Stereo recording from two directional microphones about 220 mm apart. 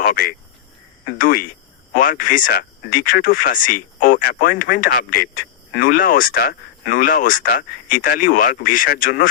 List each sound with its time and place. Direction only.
0.0 s speech: 40° left (ahead or behind)